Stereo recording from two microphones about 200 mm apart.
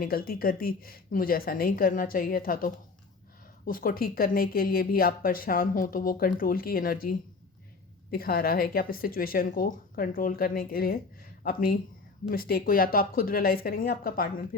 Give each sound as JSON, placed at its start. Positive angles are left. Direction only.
{"t": 0.0, "sound": "speech", "side_deg": 45}